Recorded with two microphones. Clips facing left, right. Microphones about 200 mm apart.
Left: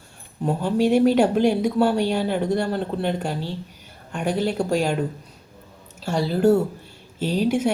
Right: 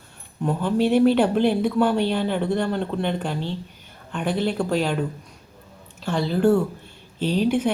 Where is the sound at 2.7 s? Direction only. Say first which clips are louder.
Even; 40° left (ahead or behind).